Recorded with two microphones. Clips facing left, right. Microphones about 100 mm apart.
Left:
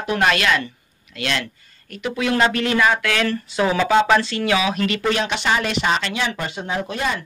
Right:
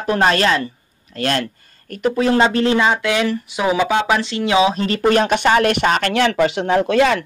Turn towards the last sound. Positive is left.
turn(degrees=-85)